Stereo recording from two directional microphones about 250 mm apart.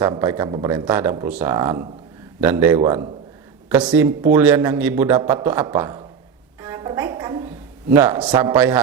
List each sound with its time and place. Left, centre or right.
0.0 s a man's voice: centre
0.7 s a man's voice: centre
6.6 s a sound: centre
8.3 s a man's voice: centre